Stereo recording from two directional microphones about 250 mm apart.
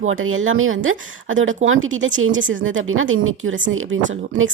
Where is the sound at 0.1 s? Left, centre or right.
Right.